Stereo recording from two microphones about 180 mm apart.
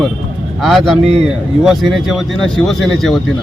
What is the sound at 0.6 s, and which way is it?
Speech, centre (ahead or behind).